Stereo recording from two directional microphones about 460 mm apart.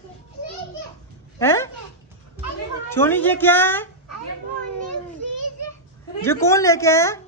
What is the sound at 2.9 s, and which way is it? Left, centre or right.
Speech, centre.